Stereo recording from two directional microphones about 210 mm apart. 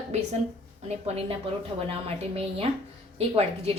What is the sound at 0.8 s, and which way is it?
A woman's voice, 30° right (ahead or behind).